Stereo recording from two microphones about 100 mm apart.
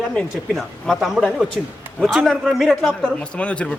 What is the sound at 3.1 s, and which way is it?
Speech, 10° left (ahead or behind).